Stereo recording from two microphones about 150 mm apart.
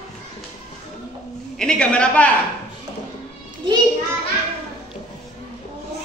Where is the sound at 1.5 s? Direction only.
5° left (ahead or behind).